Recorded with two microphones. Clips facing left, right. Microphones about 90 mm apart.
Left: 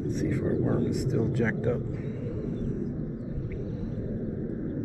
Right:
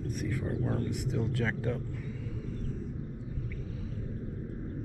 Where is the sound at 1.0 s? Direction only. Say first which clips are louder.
Left 6 dB; centre (ahead or behind).